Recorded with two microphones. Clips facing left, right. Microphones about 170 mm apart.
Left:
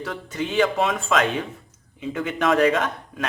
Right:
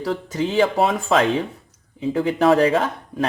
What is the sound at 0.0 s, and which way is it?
Speech, 35° right (ahead or behind).